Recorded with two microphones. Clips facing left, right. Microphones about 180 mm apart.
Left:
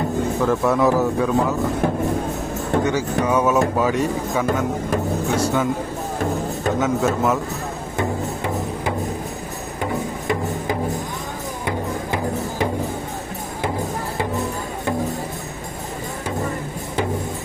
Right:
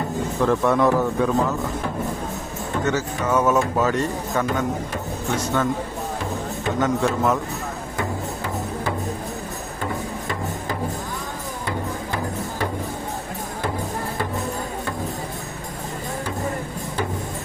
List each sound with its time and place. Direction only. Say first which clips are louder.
0.4 s a man's voice: even; 5° left (ahead or behind)
2.8 s speech: left 3 dB; 10° left (ahead or behind)
6.7 s a man's voice: even; 5° left (ahead or behind)